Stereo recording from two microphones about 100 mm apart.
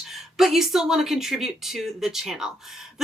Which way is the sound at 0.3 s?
5° right (ahead or behind).